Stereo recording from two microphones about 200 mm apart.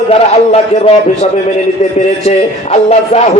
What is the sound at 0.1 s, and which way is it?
A man's voice, 30° left (ahead or behind).